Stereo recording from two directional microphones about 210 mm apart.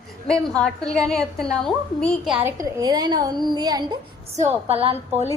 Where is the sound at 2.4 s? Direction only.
15° right (ahead or behind).